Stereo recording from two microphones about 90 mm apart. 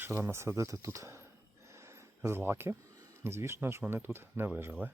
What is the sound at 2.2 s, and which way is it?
Speech, 25° right (ahead or behind).